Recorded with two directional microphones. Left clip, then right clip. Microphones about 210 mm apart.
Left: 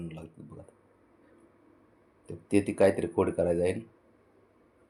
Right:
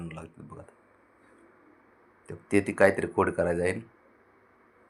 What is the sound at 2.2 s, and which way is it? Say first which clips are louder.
Speech: right 1 dB; 10° left (ahead or behind).